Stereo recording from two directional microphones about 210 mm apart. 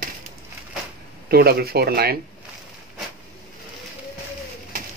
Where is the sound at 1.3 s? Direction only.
50° right (ahead or behind).